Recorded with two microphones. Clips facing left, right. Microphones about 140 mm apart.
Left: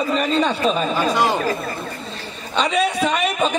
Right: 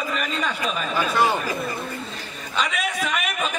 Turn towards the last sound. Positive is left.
turn(degrees=30)  # may be behind; listen again after turning